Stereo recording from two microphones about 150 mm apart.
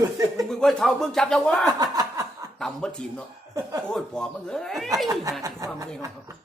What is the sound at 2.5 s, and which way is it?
Speech, 5° left (ahead or behind).